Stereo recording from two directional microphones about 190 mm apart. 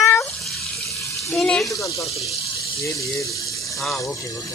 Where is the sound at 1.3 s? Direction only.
5° left (ahead or behind).